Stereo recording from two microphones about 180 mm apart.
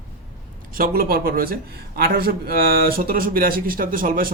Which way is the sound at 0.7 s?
55° right (ahead or behind).